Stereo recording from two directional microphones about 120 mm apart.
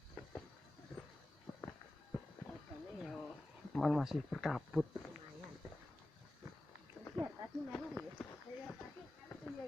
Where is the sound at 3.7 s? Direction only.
5° left (ahead or behind).